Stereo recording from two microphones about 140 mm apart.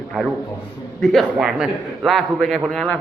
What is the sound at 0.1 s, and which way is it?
A man's voice, centre (ahead or behind).